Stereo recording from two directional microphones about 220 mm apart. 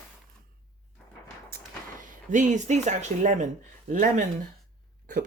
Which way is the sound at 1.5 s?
35° right (ahead or behind).